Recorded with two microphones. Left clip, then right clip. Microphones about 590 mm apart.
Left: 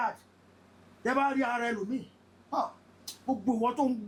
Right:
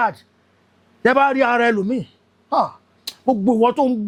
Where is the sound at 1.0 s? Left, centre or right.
Right.